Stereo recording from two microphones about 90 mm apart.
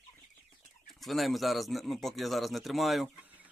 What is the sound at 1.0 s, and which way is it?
Speech, centre (ahead or behind).